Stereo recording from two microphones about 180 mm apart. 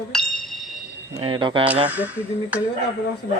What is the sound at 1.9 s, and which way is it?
Speech, 10° right (ahead or behind).